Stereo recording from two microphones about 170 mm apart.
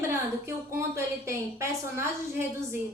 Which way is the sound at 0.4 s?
15° right (ahead or behind).